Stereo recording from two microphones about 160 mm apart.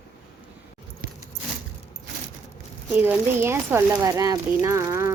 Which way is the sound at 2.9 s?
10° right (ahead or behind).